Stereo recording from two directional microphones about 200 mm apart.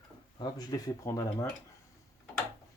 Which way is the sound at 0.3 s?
20° left (ahead or behind).